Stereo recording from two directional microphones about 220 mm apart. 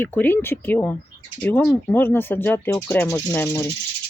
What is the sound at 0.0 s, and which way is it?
Speech, 10° left (ahead or behind).